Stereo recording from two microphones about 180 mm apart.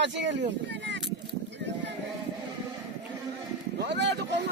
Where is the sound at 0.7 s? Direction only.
80° right.